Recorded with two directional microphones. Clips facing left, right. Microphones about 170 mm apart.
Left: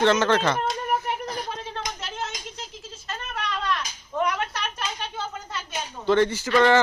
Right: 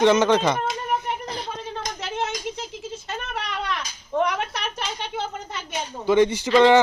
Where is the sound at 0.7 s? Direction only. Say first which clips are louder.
Even; 5° left (ahead or behind).